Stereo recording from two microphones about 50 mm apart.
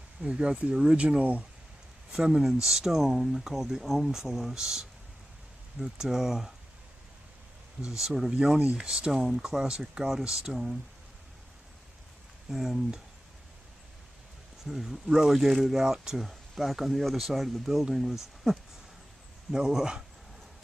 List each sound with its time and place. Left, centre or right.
0.2 s speech: centre
2.1 s speech: centre
8.0 s speech: centre
9.1 s speech: centre
12.4 s speech: centre
14.6 s speech: centre